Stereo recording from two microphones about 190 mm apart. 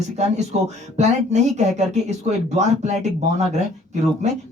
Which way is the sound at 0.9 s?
35° right (ahead or behind).